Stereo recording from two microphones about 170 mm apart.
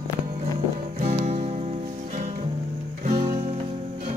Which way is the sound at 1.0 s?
50° right (ahead or behind).